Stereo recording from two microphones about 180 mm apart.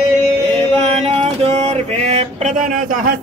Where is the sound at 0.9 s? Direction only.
35° right (ahead or behind).